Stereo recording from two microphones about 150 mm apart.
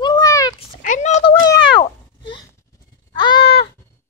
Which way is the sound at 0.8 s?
55° left (ahead or behind).